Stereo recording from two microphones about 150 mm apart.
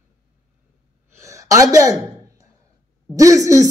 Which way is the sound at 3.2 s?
20° right (ahead or behind).